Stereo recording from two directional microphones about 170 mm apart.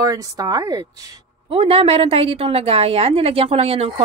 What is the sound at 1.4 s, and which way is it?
A woman's voice, 35° right (ahead or behind).